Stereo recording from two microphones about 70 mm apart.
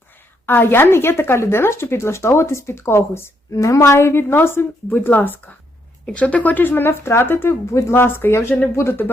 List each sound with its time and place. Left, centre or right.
0.4 s speech: left
8.4 s speech: left
8.7 s speech: left